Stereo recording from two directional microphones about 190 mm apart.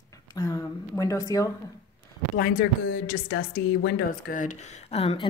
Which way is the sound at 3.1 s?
90° left.